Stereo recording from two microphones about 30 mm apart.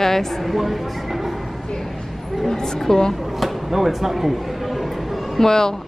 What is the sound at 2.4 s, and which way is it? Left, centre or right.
Speech, centre.